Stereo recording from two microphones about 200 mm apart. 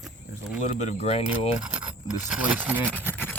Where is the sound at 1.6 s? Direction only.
5° right (ahead or behind).